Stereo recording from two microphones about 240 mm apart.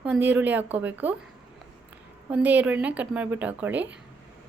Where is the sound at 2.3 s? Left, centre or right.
Centre.